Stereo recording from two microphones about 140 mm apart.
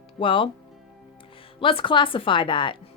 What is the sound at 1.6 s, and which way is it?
Speech, 40° left (ahead or behind).